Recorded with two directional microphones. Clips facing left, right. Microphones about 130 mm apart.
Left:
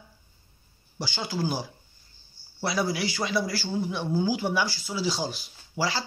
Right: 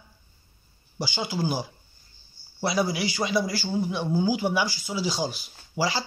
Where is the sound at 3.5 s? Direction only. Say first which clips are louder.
Right 2 dB; 5° right (ahead or behind).